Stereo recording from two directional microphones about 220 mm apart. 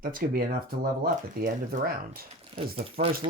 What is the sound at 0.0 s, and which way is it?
Speech, 40° right (ahead or behind).